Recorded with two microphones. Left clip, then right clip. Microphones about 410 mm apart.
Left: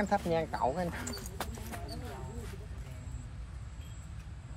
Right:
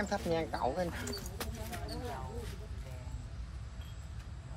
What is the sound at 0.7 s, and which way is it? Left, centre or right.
Speech, centre.